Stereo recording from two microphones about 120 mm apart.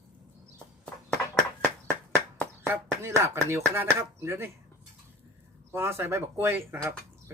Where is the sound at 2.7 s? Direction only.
25° right (ahead or behind).